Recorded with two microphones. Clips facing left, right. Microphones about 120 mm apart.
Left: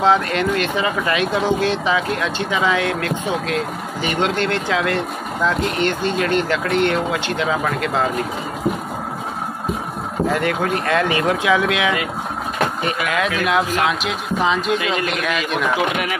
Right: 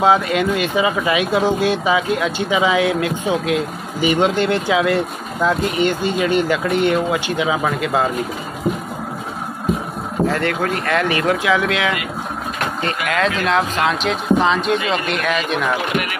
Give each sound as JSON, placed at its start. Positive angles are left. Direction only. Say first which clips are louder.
{"t": 0.0, "sound": "speech", "louder": "right 1 dB", "side_deg": -10}
{"t": 10.2, "sound": "a man's voice", "louder": "even", "side_deg": 15}